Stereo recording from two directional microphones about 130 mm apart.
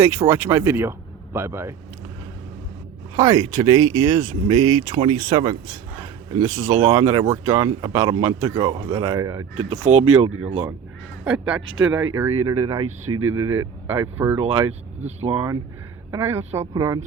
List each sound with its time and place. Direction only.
0.0 s speech: 20° right (ahead or behind)
3.2 s speech: 30° right (ahead or behind); by 5.5 s 45° right (ahead or behind)
6.6 s speech: 65° right (ahead or behind)
7.0 s speech: 20° right (ahead or behind)
7.6 s speech: 35° right (ahead or behind)
9.6 s speech: 50° right (ahead or behind)
11.3 s speech: 5° right (ahead or behind)
12.5 s speech: 25° right (ahead or behind)
13.4 s speech: 20° right (ahead or behind)
14.3 s speech: 50° right (ahead or behind)
16.1 s speech: 20° right (ahead or behind)